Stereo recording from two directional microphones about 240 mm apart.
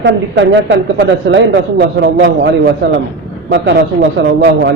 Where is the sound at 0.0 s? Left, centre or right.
Right.